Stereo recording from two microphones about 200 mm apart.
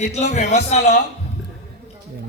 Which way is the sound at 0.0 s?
35° left (ahead or behind).